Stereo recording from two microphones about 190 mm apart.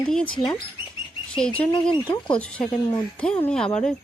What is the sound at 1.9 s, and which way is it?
Speech, 25° left (ahead or behind).